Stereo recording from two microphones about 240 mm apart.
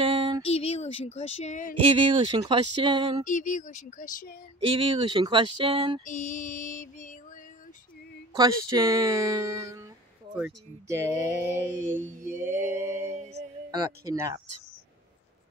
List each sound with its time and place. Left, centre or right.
0.0 s female singing: right
0.5 s a sound: left
1.1 s speech: left
2.0 s speech: centre
3.3 s speech: left
4.6 s speech: right
6.0 s speech: left
8.4 s speech: centre
13.2 s mantra: right
13.7 s speech: centre